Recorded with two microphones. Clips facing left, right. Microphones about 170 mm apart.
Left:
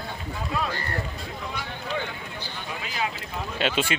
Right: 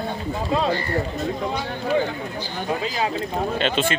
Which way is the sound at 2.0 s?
40° right (ahead or behind).